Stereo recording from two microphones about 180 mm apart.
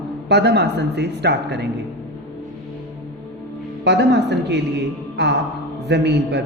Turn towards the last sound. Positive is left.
turn(degrees=-70)  # may be behind; listen again after turning